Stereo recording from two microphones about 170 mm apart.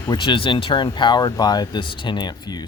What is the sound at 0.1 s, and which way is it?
Speech, 30° left (ahead or behind).